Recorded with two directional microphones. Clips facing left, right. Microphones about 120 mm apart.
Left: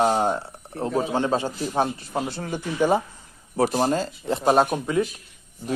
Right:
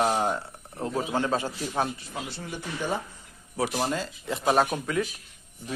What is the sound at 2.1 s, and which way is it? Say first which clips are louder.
Speech: left 8 dB; 50° left (ahead or behind).